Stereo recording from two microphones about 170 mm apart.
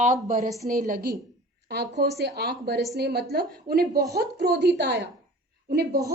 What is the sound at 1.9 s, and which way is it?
A woman's voice, 75° right (ahead or behind).